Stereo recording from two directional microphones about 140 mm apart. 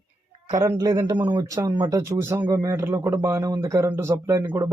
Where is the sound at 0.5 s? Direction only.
20° right (ahead or behind).